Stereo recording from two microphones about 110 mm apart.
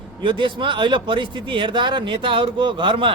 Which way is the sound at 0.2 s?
45° right (ahead or behind).